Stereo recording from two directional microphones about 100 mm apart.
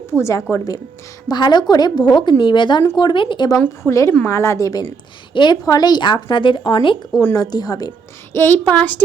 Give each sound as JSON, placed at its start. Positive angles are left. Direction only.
{"t": 0.2, "sound": "a woman's voice", "side_deg": 30}
{"t": 1.3, "sound": "speech", "side_deg": 45}
{"t": 3.6, "sound": "a woman's voice", "side_deg": 30}
{"t": 5.3, "sound": "a woman's voice", "side_deg": 50}
{"t": 7.1, "sound": "a woman's voice", "side_deg": 40}
{"t": 8.3, "sound": "speech", "side_deg": 25}